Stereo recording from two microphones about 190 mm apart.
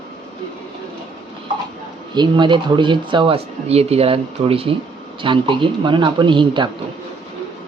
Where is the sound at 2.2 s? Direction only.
25° right (ahead or behind).